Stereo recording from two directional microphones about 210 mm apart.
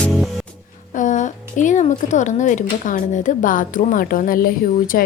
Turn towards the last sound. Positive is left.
turn(degrees=45)  # may be behind; listen again after turning